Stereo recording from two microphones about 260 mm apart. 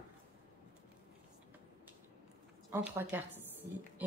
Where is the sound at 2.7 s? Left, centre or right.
Centre.